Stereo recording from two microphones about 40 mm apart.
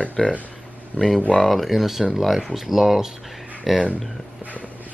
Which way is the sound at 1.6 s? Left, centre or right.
Centre.